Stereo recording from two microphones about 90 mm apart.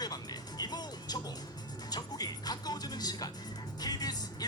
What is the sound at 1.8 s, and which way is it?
Speech, 45° left (ahead or behind).